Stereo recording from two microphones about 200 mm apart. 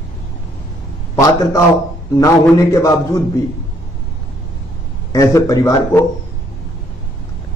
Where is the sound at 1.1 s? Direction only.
15° left (ahead or behind).